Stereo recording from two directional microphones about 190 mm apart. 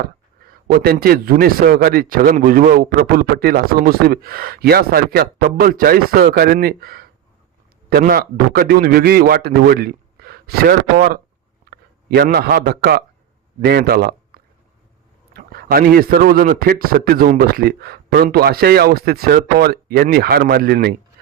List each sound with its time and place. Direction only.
0.7 s a man's voice: 50° right (ahead or behind)